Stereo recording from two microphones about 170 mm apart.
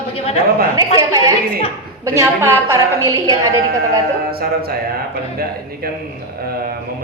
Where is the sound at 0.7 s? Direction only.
20° right (ahead or behind).